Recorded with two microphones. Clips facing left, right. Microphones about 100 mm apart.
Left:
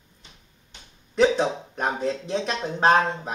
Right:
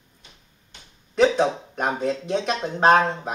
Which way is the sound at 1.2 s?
10° right (ahead or behind).